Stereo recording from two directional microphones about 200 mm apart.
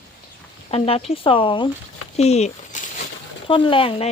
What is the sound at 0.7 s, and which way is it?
Speech, 30° left (ahead or behind).